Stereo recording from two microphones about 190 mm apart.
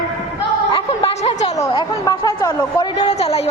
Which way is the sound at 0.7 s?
30° left (ahead or behind).